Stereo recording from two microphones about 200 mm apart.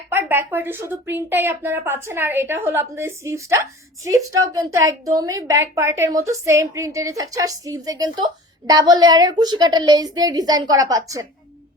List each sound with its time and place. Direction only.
0.1 s a woman's voice: 10° right (ahead or behind)